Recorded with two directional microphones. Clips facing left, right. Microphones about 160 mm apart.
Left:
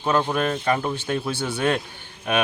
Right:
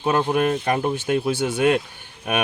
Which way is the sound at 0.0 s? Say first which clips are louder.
Right 2 dB; 15° right (ahead or behind).